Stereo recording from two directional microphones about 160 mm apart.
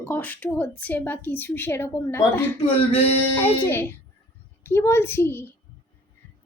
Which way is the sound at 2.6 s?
35° left (ahead or behind).